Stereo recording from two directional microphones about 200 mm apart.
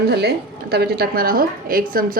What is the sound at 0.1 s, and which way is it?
A woman's voice, 55° right (ahead or behind).